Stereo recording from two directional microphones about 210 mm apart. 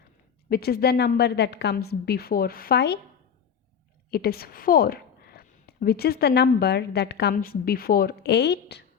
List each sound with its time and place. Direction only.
0.4 s a woman's voice: 45° left (ahead or behind)
4.1 s a woman's voice: 45° left (ahead or behind)